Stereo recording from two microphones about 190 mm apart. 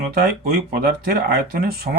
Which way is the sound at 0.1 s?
55° right (ahead or behind).